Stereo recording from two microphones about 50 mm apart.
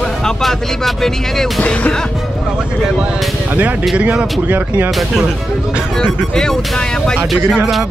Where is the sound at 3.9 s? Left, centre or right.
Right.